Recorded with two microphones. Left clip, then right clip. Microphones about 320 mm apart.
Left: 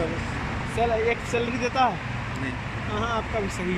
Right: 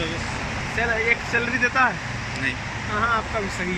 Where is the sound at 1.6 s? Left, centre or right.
Centre.